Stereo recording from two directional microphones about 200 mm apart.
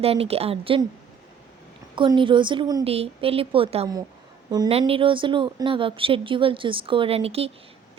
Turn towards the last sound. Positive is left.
turn(degrees=-30)  # may be behind; listen again after turning